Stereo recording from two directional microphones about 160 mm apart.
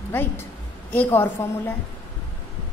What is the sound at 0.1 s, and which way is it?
A woman's voice, 10° left (ahead or behind).